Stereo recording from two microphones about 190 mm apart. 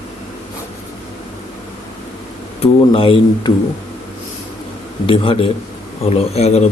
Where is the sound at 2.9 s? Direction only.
30° left (ahead or behind).